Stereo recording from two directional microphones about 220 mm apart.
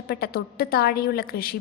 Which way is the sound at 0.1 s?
45° left (ahead or behind).